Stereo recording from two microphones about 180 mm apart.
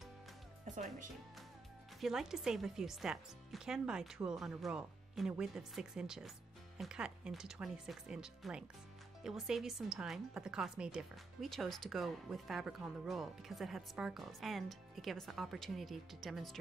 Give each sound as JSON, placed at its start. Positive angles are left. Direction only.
{"t": 0.7, "sound": "speech", "side_deg": -45}
{"t": 2.0, "sound": "speech", "side_deg": 0}